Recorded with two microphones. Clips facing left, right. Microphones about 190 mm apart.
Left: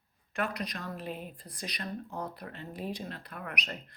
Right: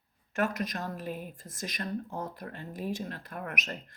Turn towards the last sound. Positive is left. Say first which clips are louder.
# right 2 dB
turn(degrees=-45)  # may be behind; listen again after turning